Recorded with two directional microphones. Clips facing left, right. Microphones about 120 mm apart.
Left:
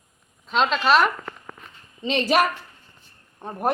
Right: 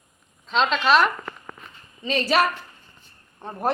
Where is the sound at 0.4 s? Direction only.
5° left (ahead or behind).